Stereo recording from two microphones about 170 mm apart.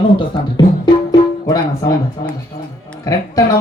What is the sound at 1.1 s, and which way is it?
Music, 20° left (ahead or behind).